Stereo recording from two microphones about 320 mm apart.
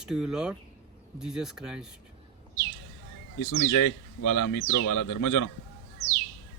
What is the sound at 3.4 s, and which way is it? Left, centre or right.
Speech, left.